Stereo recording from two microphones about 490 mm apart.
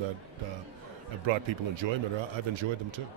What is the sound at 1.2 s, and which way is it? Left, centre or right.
A man's voice, right.